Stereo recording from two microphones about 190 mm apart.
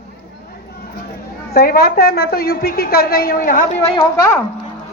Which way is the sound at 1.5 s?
50° left (ahead or behind).